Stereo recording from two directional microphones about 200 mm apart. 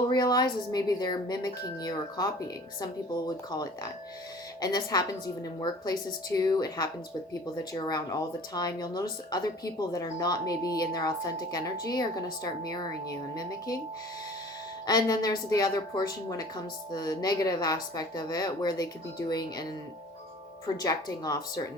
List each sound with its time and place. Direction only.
0.1 s a woman's voice: 20° left (ahead or behind)
14.8 s speech: 20° left (ahead or behind)
20.8 s speech: 20° left (ahead or behind)